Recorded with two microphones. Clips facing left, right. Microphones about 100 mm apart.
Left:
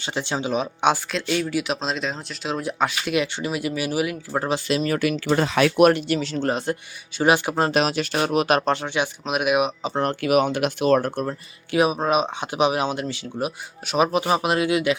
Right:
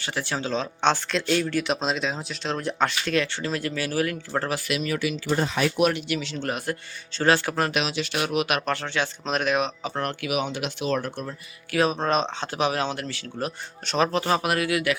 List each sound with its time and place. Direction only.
0.0 s speech: 20° left (ahead or behind)
4.5 s speech: 35° left (ahead or behind)
4.9 s speech: 65° left (ahead or behind); by 5.8 s 80° left
5.8 s speech: 40° left (ahead or behind)
7.2 s speech: 15° left (ahead or behind)
7.7 s speech: 40° left (ahead or behind)
8.7 s speech: 15° left (ahead or behind)
9.8 s speech: 25° left (ahead or behind)
10.2 s speech: 45° left (ahead or behind)
11.7 s speech: 15° left (ahead or behind)